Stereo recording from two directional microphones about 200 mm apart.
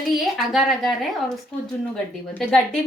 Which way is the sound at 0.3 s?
Centre (ahead or behind).